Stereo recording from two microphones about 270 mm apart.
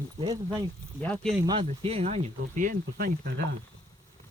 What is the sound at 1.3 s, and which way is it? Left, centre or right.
Speech, right.